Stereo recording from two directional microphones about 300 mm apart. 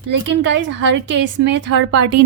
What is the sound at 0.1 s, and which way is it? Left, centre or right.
A woman's voice, right.